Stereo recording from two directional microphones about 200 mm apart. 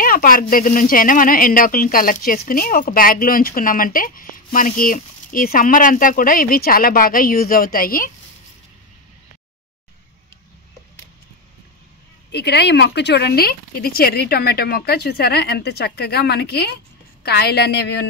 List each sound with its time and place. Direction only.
0.0 s speech: 45° left (ahead or behind)
12.3 s a woman's voice: 55° left (ahead or behind)